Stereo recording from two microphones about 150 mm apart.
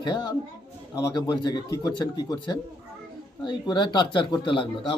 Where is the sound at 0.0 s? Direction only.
30° left (ahead or behind).